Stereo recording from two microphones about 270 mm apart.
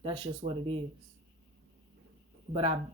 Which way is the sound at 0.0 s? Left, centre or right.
Centre.